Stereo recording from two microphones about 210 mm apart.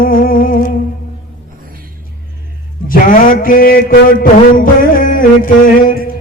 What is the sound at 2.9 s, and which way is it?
A man's voice, 40° left (ahead or behind).